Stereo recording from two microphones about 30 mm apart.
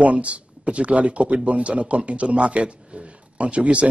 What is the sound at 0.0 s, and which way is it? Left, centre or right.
A man's voice, right.